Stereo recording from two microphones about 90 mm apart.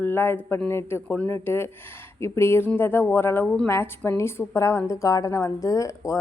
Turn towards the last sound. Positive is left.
turn(degrees=35)  # may be behind; listen again after turning